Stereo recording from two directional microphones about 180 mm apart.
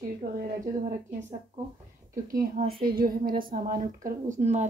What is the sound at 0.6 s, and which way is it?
Speech, 40° right (ahead or behind).